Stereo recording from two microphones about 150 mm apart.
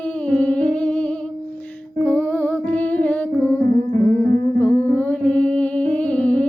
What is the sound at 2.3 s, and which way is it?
Music, 10° left (ahead or behind).